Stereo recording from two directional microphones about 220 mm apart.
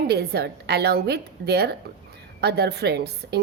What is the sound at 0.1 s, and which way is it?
A woman's voice, 50° right (ahead or behind).